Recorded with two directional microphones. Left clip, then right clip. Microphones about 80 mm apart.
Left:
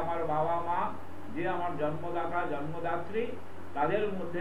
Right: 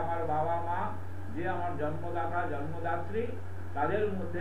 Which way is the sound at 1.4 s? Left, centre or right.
Left.